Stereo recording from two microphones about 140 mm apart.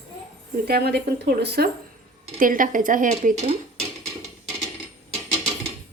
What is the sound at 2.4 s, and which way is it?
Speech, 75° right (ahead or behind).